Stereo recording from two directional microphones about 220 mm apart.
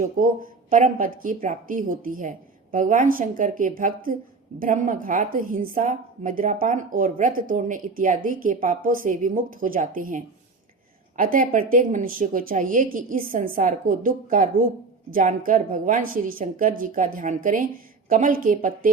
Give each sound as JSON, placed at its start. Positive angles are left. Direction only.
{"t": 0.0, "sound": "a woman's voice", "side_deg": -40}